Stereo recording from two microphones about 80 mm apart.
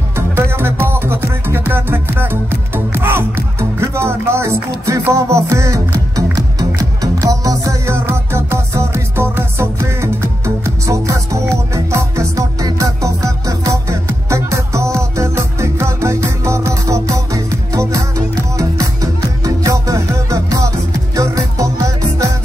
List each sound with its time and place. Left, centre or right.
0.1 s music: right